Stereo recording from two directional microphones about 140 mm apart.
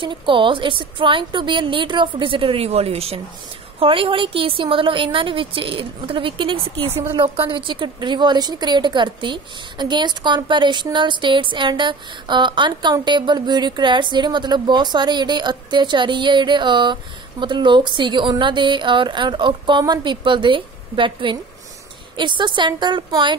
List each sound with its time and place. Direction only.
0.0 s a woman's voice: 35° right (ahead or behind)